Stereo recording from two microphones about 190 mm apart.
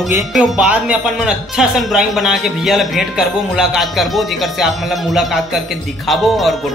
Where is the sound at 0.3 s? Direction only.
5° right (ahead or behind).